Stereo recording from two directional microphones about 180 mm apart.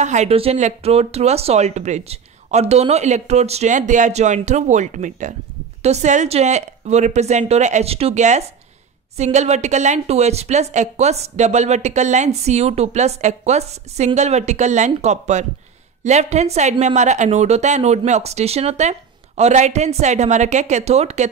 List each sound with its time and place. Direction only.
0.0 s a woman's voice: 40° right (ahead or behind)